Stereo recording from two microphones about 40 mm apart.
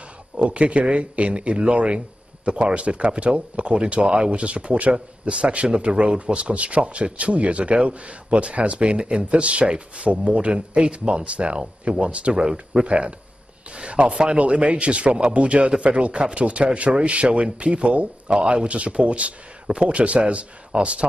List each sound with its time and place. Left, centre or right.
0.4 s speech: right